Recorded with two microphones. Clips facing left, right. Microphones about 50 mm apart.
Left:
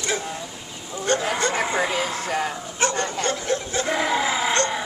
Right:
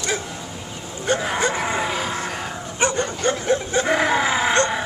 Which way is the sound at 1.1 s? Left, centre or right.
Centre.